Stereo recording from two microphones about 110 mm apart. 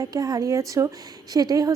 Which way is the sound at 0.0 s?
35° right (ahead or behind).